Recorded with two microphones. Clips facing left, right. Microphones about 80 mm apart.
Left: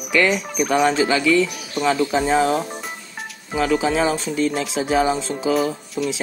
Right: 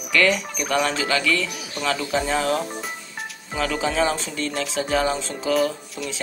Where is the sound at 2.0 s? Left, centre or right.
Centre.